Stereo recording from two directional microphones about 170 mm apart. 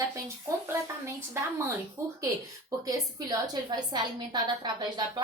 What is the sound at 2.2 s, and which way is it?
A woman's voice, 20° right (ahead or behind).